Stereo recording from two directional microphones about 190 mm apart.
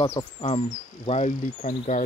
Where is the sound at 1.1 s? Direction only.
35° left (ahead or behind).